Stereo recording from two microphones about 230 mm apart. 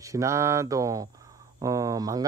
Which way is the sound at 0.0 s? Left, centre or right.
Centre.